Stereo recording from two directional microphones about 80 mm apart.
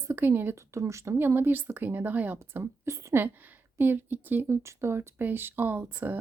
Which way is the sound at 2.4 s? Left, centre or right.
Right.